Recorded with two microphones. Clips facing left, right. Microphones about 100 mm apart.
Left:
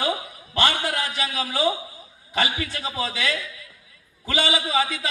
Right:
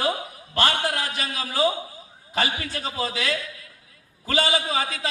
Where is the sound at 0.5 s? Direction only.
40° right (ahead or behind).